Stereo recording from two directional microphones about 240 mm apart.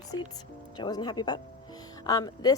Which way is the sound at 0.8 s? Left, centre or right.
Centre.